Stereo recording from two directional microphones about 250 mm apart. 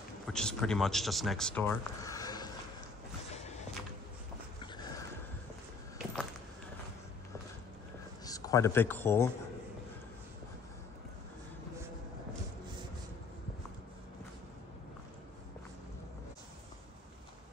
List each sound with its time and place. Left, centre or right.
0.3 s speech: centre
4.6 s a sound: centre
8.3 s a man's voice: centre